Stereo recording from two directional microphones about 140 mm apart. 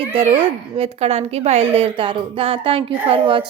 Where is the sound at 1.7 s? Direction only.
40° right (ahead or behind).